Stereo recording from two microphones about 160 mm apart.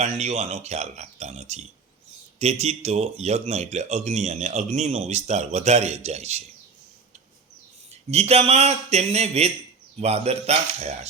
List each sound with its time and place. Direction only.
0.0 s speech: 45° right (ahead or behind)
8.1 s a man's voice: 40° right (ahead or behind)